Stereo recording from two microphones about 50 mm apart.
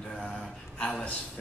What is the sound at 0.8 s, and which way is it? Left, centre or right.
Speech, centre.